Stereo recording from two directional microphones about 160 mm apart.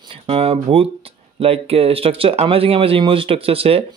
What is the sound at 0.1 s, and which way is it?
Speech, 35° right (ahead or behind).